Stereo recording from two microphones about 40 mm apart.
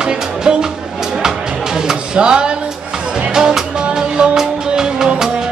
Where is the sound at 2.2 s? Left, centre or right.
Right.